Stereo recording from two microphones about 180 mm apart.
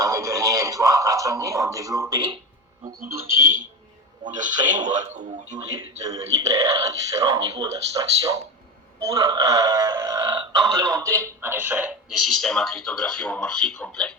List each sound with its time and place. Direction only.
0.0 s speech: 15° right (ahead or behind)
4.2 s speech: 45° right (ahead or behind)
4.8 s speech: 25° right (ahead or behind)
5.1 s speech: 40° right (ahead or behind)
5.5 s speech: 20° right (ahead or behind); by 14.2 s 5° left (ahead or behind)